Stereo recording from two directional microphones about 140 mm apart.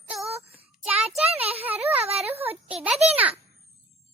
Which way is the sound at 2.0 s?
45° right (ahead or behind).